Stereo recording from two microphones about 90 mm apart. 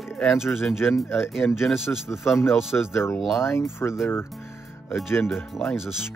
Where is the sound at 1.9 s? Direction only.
20° left (ahead or behind).